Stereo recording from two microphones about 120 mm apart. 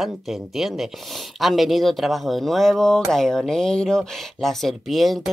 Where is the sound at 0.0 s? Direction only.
Centre (ahead or behind).